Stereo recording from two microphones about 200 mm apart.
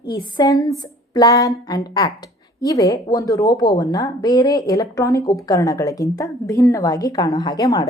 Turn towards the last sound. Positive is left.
turn(degrees=15)  # may be behind; listen again after turning